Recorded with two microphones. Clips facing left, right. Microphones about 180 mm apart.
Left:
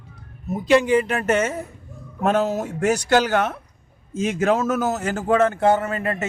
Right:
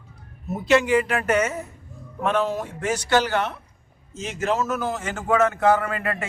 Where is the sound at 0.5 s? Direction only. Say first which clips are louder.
Left 2 dB; 15° left (ahead or behind).